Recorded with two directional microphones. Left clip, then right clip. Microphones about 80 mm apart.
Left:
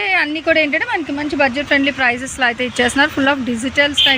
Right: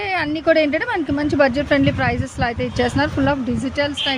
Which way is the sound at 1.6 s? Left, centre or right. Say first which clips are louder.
Left 2 dB; right.